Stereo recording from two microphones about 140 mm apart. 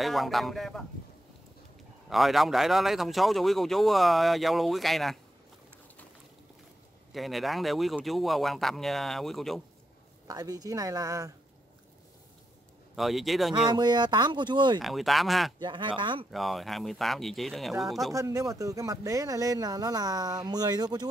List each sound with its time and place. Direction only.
0.0 s a man's voice: centre (ahead or behind)
2.0 s a man's voice: centre (ahead or behind)
7.2 s a man's voice: centre (ahead or behind)
10.2 s speech: 25° right (ahead or behind)
12.9 s a man's voice: centre (ahead or behind)
13.7 s speech: 30° right (ahead or behind)
14.8 s a man's voice: centre (ahead or behind)
15.6 s speech: 35° right (ahead or behind)
16.3 s a man's voice: centre (ahead or behind)
18.1 s speech: 20° right (ahead or behind)